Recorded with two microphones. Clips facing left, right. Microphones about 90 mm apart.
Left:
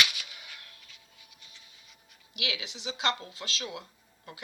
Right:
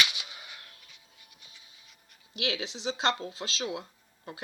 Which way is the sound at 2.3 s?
35° right (ahead or behind).